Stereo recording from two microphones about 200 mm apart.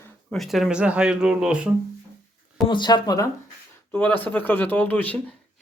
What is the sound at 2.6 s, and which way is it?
Speech, 25° left (ahead or behind).